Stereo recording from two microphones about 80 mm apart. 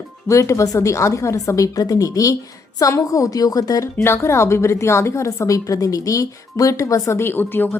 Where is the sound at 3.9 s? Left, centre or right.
Left.